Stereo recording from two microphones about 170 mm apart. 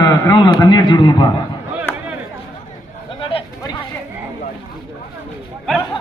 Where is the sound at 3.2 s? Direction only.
30° left (ahead or behind).